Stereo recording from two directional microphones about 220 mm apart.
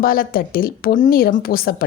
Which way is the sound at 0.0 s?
40° left (ahead or behind).